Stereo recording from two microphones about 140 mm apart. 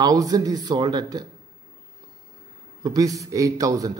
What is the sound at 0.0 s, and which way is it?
Speech, 25° right (ahead or behind).